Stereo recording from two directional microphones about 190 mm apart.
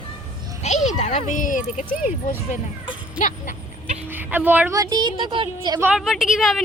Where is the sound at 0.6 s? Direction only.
35° left (ahead or behind).